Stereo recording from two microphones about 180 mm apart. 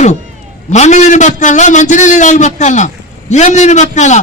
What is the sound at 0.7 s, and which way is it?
A man's voice, 40° left (ahead or behind).